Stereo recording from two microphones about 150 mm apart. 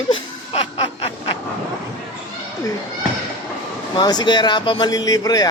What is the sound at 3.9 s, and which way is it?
Speech, 30° left (ahead or behind).